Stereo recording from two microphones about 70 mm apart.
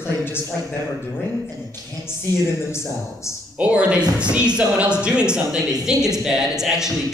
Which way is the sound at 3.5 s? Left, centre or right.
Centre.